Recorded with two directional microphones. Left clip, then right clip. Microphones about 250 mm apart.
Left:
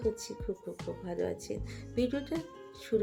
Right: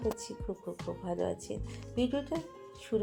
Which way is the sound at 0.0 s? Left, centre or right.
Centre.